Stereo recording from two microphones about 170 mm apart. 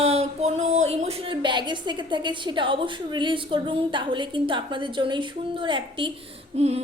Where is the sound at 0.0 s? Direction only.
40° right (ahead or behind).